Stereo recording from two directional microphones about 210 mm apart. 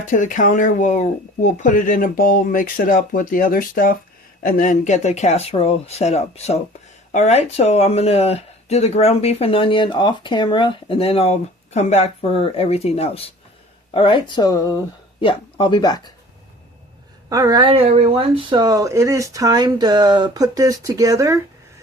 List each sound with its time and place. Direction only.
0.0 s speech: 40° left (ahead or behind); by 16.1 s 20° left (ahead or behind)
17.2 s speech: 15° right (ahead or behind)